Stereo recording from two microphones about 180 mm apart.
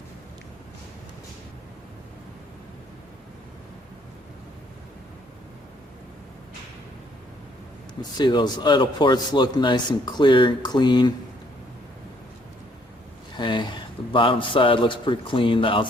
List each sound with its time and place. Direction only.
8.2 s a man's voice: 25° left (ahead or behind)
13.3 s a man's voice: 25° left (ahead or behind)